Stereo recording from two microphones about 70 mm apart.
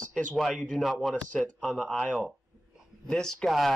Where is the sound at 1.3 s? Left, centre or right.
Centre.